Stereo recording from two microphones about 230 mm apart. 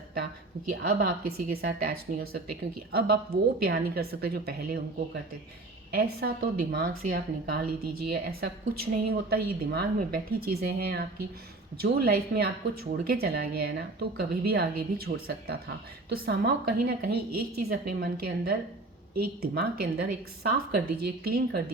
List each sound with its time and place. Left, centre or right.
0.7 s a woman's voice: right
5.9 s a woman's voice: right